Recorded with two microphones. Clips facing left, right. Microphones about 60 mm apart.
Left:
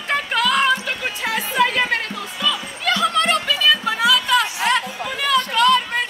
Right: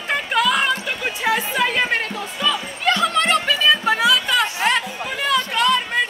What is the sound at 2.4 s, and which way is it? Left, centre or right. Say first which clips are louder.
Music: right 2 dB; right.